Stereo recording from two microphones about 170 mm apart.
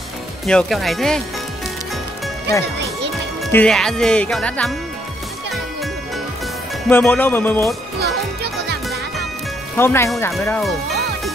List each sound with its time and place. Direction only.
0.5 s speech: centre (ahead or behind)
3.5 s speech: 5° left (ahead or behind)
6.9 s speech: 10° left (ahead or behind)
8.0 s music: 75° right (ahead or behind)
9.8 s speech: 15° left (ahead or behind)